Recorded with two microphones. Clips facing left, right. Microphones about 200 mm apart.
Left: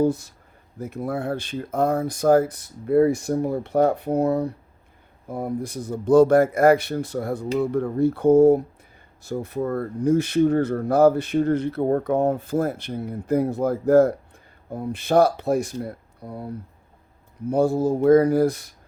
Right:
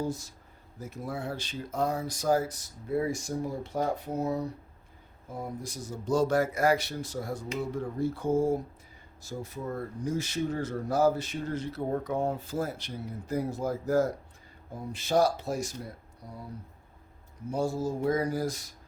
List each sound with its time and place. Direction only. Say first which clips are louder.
0.0 s speech: left 12 dB; 60° left (ahead or behind)
17.5 s speech: left 10 dB; 60° left (ahead or behind)